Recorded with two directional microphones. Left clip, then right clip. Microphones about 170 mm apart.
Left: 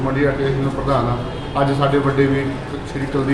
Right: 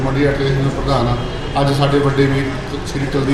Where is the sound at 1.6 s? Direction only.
5° left (ahead or behind).